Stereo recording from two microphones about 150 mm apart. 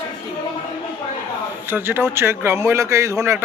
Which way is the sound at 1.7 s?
15° right (ahead or behind).